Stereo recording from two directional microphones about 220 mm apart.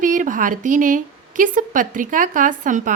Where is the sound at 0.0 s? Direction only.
35° right (ahead or behind).